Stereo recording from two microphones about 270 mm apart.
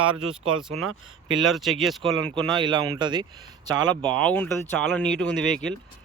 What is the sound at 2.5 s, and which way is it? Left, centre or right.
Speech, centre.